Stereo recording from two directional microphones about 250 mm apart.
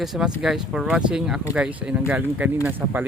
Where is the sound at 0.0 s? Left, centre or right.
Centre.